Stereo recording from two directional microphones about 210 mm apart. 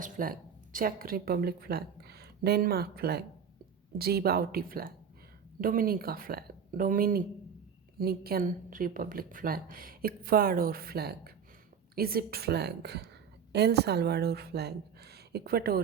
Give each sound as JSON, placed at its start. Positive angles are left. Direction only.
{"t": 0.0, "sound": "a woman's voice", "side_deg": -40}